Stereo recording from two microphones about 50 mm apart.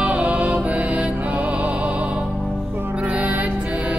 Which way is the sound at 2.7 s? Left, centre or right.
Right.